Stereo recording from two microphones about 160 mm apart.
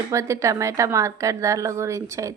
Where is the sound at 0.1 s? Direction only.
20° right (ahead or behind).